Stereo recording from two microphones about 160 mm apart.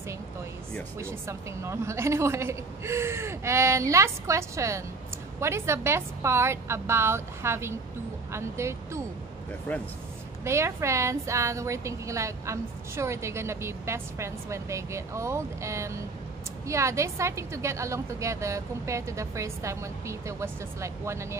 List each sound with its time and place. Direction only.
0.9 s a woman's voice: 15° right (ahead or behind)
9.7 s speech: 10° left (ahead or behind)
10.4 s a woman's voice: 15° right (ahead or behind)